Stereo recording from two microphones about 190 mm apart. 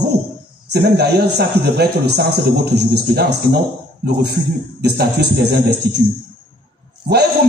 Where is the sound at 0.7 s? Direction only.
60° right (ahead or behind).